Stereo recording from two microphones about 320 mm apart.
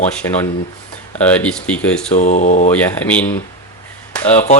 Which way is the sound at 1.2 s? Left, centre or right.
Centre.